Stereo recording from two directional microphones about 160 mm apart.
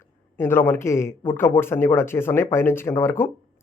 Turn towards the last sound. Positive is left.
turn(degrees=15)  # may be behind; listen again after turning